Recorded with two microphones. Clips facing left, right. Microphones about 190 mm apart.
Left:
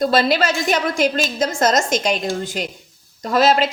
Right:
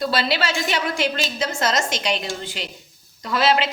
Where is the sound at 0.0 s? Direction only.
45° left (ahead or behind).